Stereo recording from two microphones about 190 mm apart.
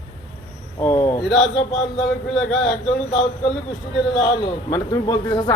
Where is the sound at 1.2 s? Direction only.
Centre (ahead or behind).